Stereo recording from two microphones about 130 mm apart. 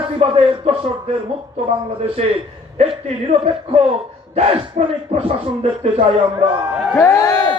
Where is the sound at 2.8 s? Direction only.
55° right (ahead or behind).